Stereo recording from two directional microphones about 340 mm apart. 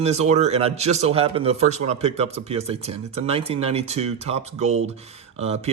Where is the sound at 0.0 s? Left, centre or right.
Centre.